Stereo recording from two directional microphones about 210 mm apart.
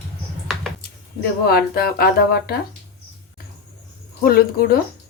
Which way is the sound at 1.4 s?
45° left (ahead or behind).